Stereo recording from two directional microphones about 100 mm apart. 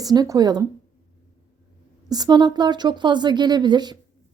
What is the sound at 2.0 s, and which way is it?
Speech, 40° right (ahead or behind).